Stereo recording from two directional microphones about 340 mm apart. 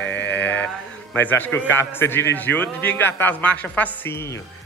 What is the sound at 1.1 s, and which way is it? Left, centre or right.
A man's voice, centre.